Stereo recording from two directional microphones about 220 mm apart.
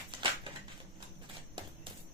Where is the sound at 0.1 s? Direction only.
20° right (ahead or behind).